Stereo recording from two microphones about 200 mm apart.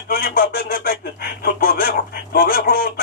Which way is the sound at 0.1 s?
50° left (ahead or behind).